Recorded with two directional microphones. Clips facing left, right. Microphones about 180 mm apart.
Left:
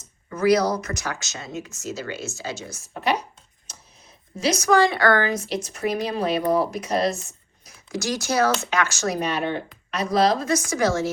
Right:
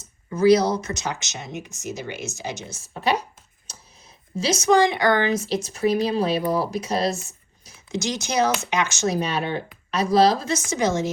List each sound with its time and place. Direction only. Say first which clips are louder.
0.3 s speech: right 2 dB; 25° right (ahead or behind)
4.4 s speech: right 1 dB; 25° right (ahead or behind)
5.5 s speech: right 4 dB; 30° right (ahead or behind)
7.6 s speech: right 1 dB; 20° right (ahead or behind)